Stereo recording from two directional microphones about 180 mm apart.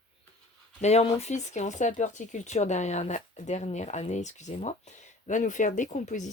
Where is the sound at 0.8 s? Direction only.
35° left (ahead or behind).